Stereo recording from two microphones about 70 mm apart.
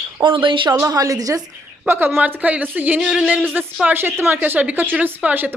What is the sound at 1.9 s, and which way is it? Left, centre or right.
Speech, right.